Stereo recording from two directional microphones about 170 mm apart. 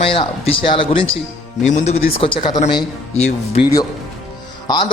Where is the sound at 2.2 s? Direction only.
30° left (ahead or behind).